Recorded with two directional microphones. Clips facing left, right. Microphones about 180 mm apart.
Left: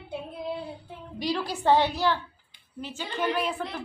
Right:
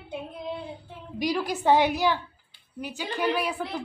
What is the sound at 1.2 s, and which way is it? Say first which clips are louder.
A woman's voice: right 2 dB; 15° right (ahead or behind).